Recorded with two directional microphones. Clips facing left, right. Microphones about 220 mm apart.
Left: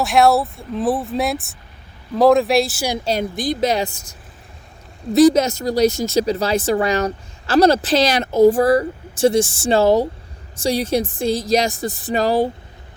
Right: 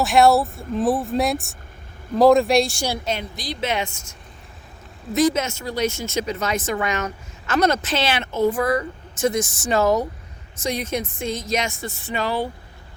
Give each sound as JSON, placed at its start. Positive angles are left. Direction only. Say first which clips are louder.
{"t": 0.0, "sound": "speech", "louder": "left 1 dB", "side_deg": 0}
{"t": 3.0, "sound": "speech", "louder": "left 6 dB", "side_deg": 35}
{"t": 3.3, "sound": "speech", "louder": "left 7 dB", "side_deg": 50}
{"t": 5.1, "sound": "speech", "louder": "left 7 dB", "side_deg": 35}